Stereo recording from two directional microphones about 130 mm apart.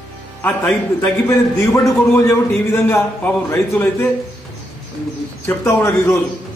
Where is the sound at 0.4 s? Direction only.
15° left (ahead or behind).